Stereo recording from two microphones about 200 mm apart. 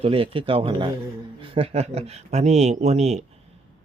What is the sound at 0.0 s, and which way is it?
Speech, 25° right (ahead or behind).